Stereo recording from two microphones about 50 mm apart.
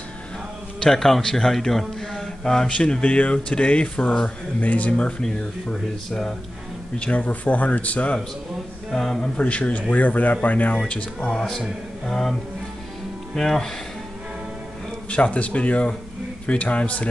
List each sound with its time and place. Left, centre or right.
0.7 s a man's voice: centre; by 5.1 s left
5.2 s a man's voice: centre
7.0 s speech: left
8.9 s a man's voice: centre
9.4 s speech: left
10.8 s a man's voice: centre
15.0 s speech: left